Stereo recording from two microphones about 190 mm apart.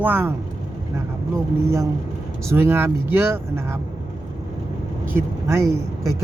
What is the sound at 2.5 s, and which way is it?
Speech, 15° right (ahead or behind).